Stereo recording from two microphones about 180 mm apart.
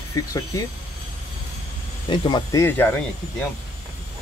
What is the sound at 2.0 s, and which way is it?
Speech, 25° left (ahead or behind).